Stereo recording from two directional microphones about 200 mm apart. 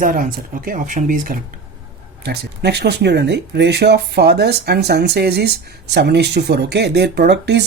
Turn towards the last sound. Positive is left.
turn(degrees=-60)  # may be behind; listen again after turning